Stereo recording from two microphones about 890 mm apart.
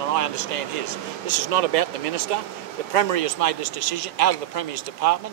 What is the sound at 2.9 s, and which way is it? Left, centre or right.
Speech, right.